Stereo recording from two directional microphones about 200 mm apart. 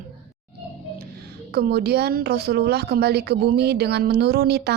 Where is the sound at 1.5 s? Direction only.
50° right (ahead or behind).